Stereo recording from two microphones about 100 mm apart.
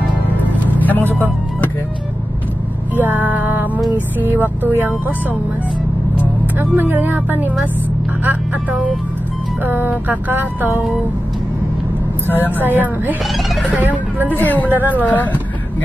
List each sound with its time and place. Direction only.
0.8 s speech: 15° left (ahead or behind)
3.0 s speech: 15° right (ahead or behind)
6.6 s speech: 20° right (ahead or behind)
9.7 s speech: 20° right (ahead or behind)
12.3 s speech: 20° left (ahead or behind)
12.6 s speech: 20° right (ahead or behind)
14.3 s a woman's voice: 15° left (ahead or behind)
14.8 s speech: 15° right (ahead or behind)
15.0 s a woman's voice: 15° left (ahead or behind)